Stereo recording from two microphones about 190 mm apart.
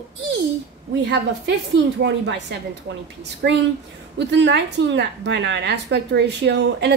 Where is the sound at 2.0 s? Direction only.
65° right (ahead or behind).